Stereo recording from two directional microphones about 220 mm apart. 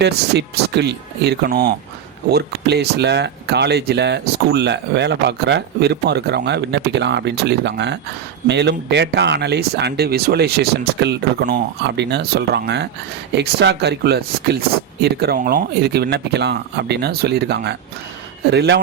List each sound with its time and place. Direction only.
0.0 s speech: 50° right (ahead or behind)